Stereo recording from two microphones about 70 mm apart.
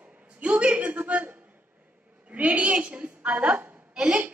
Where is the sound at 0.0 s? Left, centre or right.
Centre.